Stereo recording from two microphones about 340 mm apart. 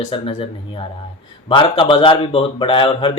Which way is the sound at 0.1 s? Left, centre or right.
Centre.